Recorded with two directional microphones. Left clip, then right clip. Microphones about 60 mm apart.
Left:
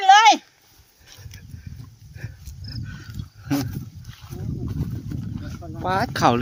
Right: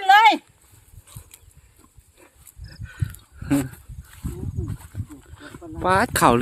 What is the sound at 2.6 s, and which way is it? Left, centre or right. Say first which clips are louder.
Dog: left 1 dB; right.